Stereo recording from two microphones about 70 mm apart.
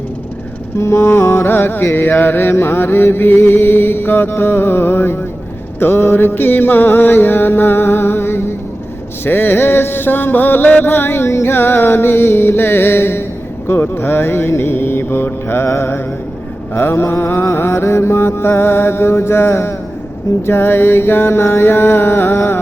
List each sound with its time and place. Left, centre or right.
0.8 s music: left